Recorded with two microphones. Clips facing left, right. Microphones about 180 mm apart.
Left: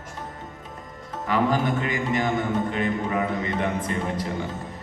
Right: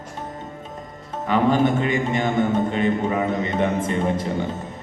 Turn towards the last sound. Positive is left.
turn(degrees=-25)  # may be behind; listen again after turning